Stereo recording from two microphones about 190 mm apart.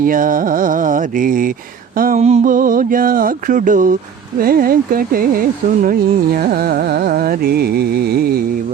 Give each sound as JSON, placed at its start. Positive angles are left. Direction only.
{"t": 0.0, "sound": "speech", "side_deg": -45}